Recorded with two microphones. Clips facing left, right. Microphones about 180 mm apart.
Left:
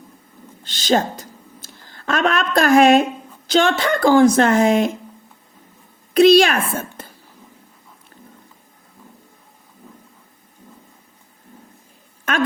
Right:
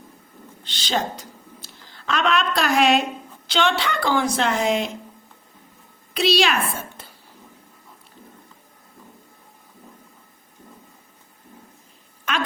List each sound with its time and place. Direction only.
0.6 s a woman's voice: 45° left (ahead or behind)
6.1 s a woman's voice: 50° left (ahead or behind)
12.2 s a sound: 50° left (ahead or behind)